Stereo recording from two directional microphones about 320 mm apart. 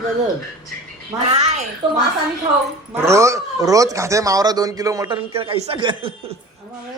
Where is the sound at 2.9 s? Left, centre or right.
Centre.